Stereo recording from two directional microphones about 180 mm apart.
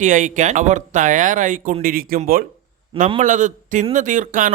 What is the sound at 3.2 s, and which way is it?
A man's voice, 45° right (ahead or behind).